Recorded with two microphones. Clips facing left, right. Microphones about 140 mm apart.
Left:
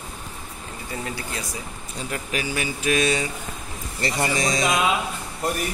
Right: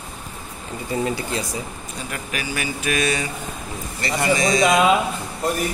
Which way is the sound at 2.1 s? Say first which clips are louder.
Left 1 dB; 25° left (ahead or behind).